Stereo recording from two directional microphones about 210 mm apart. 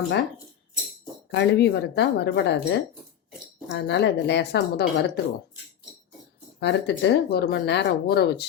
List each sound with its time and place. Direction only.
1.3 s speech: 55° left (ahead or behind)
6.6 s speech: 55° left (ahead or behind)